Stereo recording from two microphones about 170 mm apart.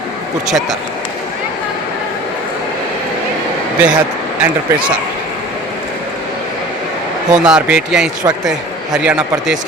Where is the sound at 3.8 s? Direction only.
5° right (ahead or behind).